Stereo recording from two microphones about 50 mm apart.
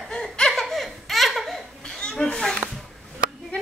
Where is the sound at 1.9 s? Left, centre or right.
Centre.